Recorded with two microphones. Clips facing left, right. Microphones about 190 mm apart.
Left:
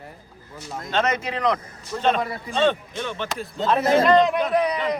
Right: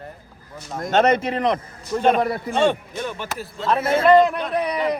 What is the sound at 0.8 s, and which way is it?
Speech, 45° right (ahead or behind).